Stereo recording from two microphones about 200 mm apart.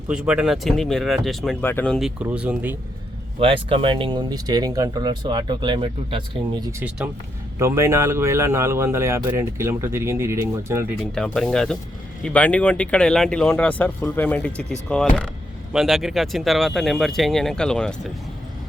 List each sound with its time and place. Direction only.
0.1 s speech: 5° right (ahead or behind)
3.4 s speech: 25° right (ahead or behind)
11.0 s speech: 5° left (ahead or behind)